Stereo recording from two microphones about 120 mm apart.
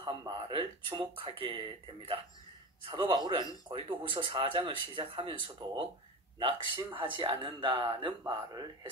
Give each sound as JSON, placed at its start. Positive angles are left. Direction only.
{"t": 0.2, "sound": "speech", "side_deg": -40}